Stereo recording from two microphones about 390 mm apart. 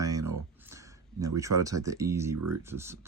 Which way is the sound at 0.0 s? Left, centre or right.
Centre.